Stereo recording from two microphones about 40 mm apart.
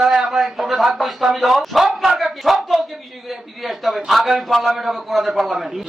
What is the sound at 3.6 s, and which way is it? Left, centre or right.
A man's voice, centre.